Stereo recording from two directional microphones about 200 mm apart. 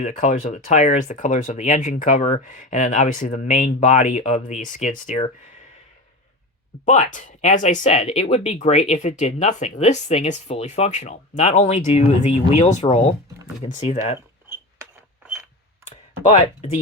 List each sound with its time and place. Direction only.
0.0 s speech: 35° left (ahead or behind)
6.8 s speech: 35° left (ahead or behind)
16.3 s speech: 35° left (ahead or behind)